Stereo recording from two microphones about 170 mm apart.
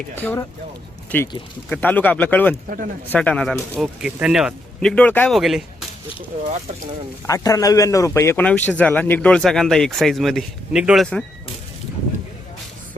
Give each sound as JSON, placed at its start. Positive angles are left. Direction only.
{"t": 0.2, "sound": "a man's voice", "side_deg": 10}
{"t": 2.6, "sound": "speech", "side_deg": -55}
{"t": 3.1, "sound": "a man's voice", "side_deg": 5}
{"t": 5.4, "sound": "speech", "side_deg": 0}
{"t": 7.3, "sound": "a man's voice", "side_deg": 20}